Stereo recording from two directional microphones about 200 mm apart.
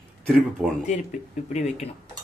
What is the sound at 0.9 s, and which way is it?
Speech, 35° left (ahead or behind).